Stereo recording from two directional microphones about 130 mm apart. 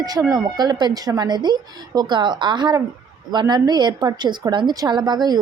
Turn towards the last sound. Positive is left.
turn(degrees=-30)  # may be behind; listen again after turning